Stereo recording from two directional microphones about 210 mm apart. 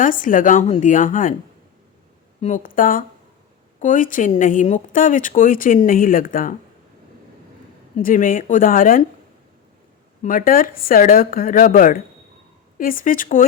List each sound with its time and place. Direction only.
0.0 s speech: 40° left (ahead or behind)
2.4 s speech: 40° left (ahead or behind)
7.9 s speech: 40° left (ahead or behind)
10.2 s speech: 40° left (ahead or behind)